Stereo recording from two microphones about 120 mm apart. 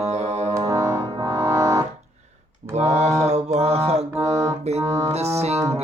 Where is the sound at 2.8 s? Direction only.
65° right (ahead or behind).